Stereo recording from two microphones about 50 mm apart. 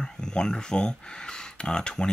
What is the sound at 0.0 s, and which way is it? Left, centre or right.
Speech, centre.